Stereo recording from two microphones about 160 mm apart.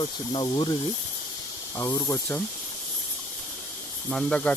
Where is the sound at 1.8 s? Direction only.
15° left (ahead or behind).